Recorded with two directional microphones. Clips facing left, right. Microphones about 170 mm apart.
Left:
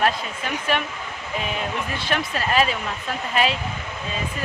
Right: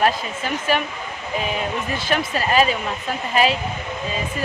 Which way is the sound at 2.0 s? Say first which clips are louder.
Right 3 dB; 5° right (ahead or behind).